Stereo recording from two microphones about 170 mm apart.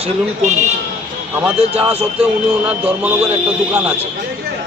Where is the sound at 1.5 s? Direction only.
35° right (ahead or behind).